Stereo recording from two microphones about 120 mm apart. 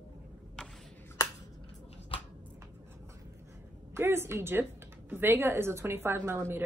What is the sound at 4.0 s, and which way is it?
A woman's voice, 20° right (ahead or behind).